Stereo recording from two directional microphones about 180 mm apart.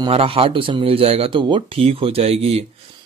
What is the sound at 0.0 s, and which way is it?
Speech, 30° right (ahead or behind).